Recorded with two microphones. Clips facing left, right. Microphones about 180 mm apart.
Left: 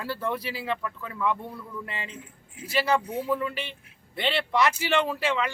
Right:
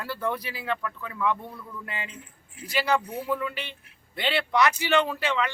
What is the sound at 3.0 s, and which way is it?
Speech, 20° left (ahead or behind).